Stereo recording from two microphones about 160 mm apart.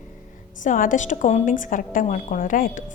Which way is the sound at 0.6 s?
55° left (ahead or behind).